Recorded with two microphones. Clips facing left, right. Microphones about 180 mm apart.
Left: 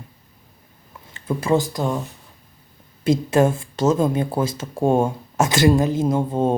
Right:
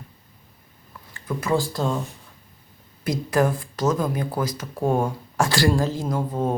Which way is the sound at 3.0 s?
25° left (ahead or behind).